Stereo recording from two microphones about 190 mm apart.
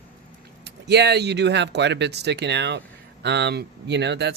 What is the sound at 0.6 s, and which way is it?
Speech, 60° right (ahead or behind).